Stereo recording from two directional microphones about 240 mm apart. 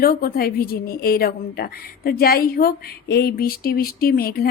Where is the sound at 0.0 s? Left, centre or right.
Left.